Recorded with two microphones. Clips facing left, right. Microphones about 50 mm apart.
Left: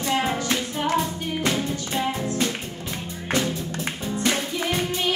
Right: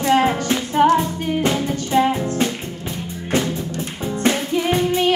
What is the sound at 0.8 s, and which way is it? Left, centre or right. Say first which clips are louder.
Music: right 12 dB; right.